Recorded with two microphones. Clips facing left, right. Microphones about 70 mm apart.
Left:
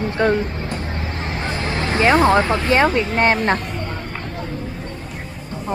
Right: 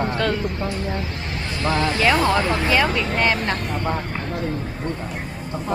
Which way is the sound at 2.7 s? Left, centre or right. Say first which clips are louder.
Left 6 dB; left.